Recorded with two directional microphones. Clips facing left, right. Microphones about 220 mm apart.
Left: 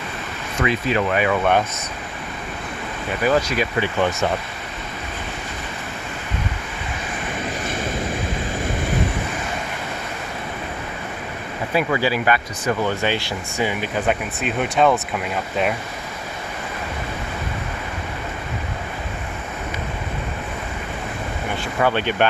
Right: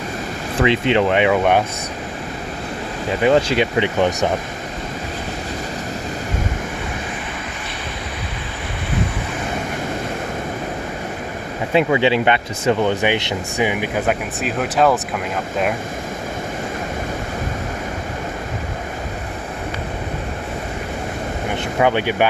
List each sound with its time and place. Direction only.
0.6 s speech: 25° right (ahead or behind)
3.2 s speech: 25° right (ahead or behind)
11.7 s speech: 25° right (ahead or behind)
14.1 s speech: centre (ahead or behind)
21.5 s speech: 20° right (ahead or behind)